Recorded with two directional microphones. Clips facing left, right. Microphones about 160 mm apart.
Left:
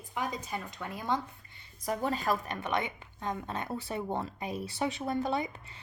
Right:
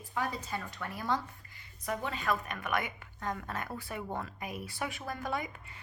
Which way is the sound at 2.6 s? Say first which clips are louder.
Left 2 dB; 25° left (ahead or behind).